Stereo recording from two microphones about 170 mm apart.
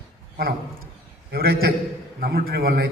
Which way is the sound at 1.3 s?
70° right (ahead or behind).